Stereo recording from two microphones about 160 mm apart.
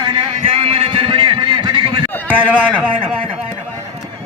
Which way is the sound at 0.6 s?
40° right (ahead or behind).